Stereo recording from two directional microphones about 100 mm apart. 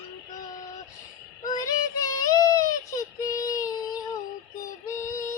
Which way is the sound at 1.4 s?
35° left (ahead or behind).